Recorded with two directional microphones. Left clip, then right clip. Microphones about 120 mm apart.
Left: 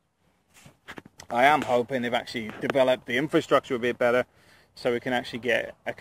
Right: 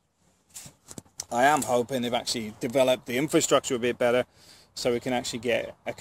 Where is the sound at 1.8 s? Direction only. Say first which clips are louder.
Left 1 dB; 35° left (ahead or behind).